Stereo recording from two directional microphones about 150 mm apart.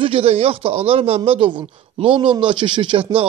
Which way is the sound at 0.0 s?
40° right (ahead or behind).